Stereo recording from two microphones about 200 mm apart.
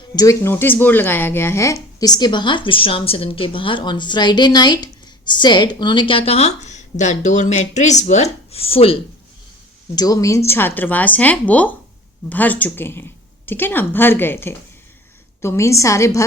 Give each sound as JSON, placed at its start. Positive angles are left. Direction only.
{"t": 0.2, "sound": "speech", "side_deg": 15}